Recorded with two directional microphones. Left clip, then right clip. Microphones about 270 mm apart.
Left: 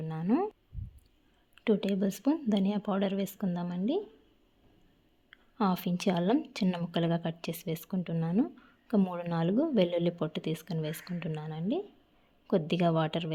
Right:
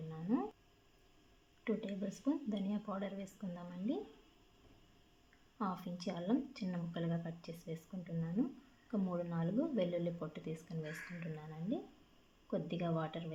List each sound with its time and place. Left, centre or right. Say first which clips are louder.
0.1 s a sound: left 9 dB; left
1.6 s speech: left 12 dB; left
5.5 s speech: left 11 dB; left